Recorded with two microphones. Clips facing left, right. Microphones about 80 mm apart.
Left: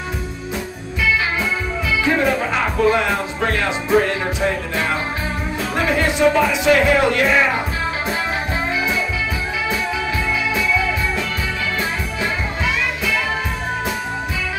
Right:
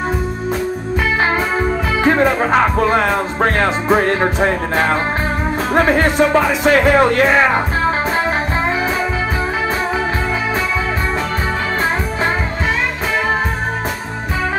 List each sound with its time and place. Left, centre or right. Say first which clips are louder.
2.0 s music: right 5 dB; right
5.8 s speech: right 5 dB; right